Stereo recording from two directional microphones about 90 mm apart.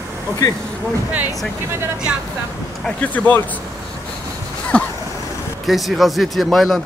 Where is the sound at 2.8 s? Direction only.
15° left (ahead or behind).